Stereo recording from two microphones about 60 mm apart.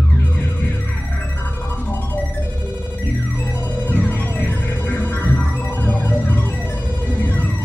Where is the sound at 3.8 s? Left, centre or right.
Left.